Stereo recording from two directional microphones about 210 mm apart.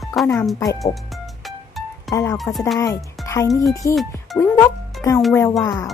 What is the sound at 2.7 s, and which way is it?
Speech, 15° left (ahead or behind).